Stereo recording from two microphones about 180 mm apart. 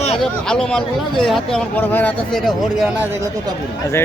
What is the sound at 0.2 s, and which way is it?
Speech, 5° left (ahead or behind).